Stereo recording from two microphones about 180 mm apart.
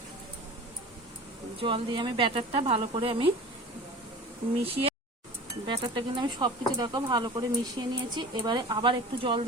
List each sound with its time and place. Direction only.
1.5 s speech: 30° right (ahead or behind)
4.6 s speech: 30° right (ahead or behind)